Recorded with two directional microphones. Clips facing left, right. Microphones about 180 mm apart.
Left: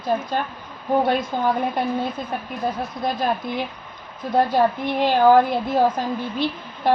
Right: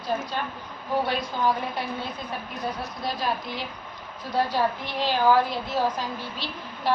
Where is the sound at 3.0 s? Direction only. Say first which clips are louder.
Left 6 dB; 50° left (ahead or behind).